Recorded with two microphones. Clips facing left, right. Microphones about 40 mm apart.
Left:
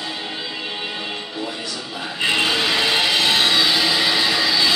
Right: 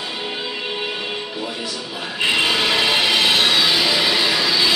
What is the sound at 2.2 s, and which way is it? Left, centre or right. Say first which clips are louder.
Music: right 1 dB; centre.